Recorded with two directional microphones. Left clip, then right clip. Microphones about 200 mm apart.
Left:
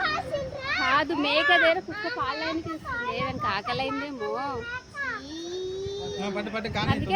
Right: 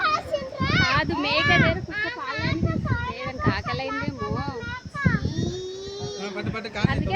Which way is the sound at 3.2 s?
10° left (ahead or behind).